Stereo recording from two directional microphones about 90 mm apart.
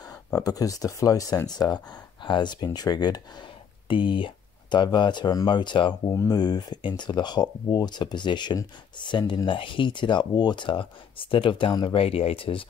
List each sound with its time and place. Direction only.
0.3 s speech: 45° left (ahead or behind)
2.2 s speech: 60° left (ahead or behind)
3.9 s speech: 70° left (ahead or behind); by 5.5 s 50° left (ahead or behind)
5.5 s speech: 60° left (ahead or behind)
6.1 s speech: 45° left (ahead or behind); by 12.6 s 85° left